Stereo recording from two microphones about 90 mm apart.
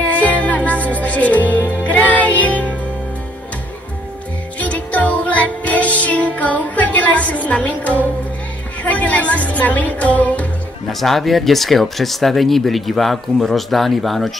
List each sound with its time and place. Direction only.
0.0 s music: 15° left (ahead or behind)
4.6 s music: 15° left (ahead or behind)
8.8 s speech: 15° left (ahead or behind)
10.9 s speech: centre (ahead or behind)